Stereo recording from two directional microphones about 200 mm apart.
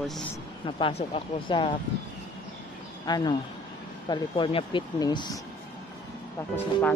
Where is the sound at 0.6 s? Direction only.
25° left (ahead or behind).